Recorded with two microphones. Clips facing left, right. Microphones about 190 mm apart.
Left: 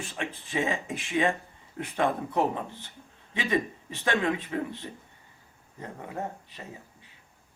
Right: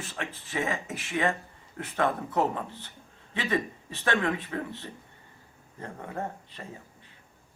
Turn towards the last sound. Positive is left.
turn(degrees=10)  # may be behind; listen again after turning